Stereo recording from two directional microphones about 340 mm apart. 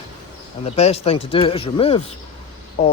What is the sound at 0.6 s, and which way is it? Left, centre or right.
Speech, centre.